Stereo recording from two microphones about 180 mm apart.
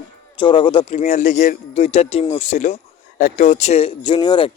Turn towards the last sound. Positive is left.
turn(degrees=25)  # may be behind; listen again after turning